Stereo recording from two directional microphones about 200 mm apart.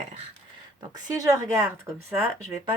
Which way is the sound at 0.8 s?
20° right (ahead or behind).